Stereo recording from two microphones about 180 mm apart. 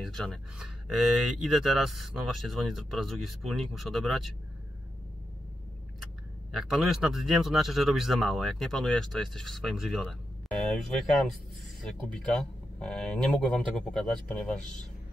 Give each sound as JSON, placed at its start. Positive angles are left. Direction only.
{"t": 0.0, "sound": "speech", "side_deg": 0}
{"t": 6.5, "sound": "speech", "side_deg": 0}
{"t": 12.1, "sound": "speech", "side_deg": 5}